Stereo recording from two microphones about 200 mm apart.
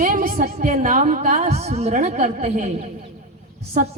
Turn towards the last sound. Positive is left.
turn(degrees=-40)  # may be behind; listen again after turning